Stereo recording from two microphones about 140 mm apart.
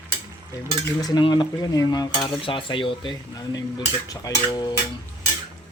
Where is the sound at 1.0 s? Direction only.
30° left (ahead or behind).